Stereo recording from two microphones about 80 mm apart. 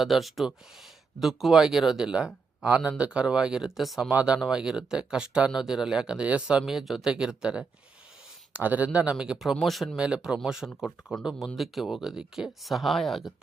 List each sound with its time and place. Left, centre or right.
0.0 s speech: centre
4.1 s speech: centre
10.0 s speech: centre